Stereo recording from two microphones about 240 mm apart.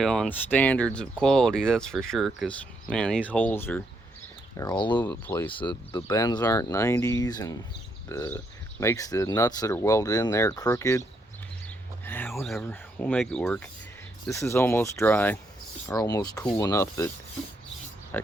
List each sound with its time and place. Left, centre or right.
0.0 s speech: centre
4.9 s speech: centre
5.5 s speech: centre
12.0 s speech: centre
18.1 s a sound: centre